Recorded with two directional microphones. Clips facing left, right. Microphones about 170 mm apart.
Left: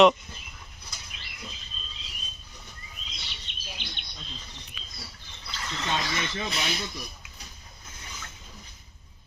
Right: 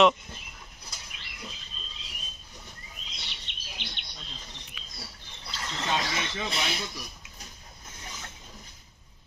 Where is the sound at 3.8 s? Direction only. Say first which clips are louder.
Right 3 dB; 75° right (ahead or behind).